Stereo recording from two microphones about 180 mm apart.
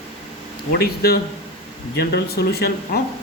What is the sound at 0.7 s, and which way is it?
Speech, 60° left (ahead or behind).